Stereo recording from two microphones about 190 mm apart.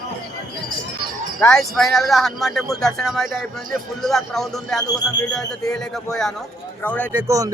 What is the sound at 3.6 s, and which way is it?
Speech, 45° right (ahead or behind).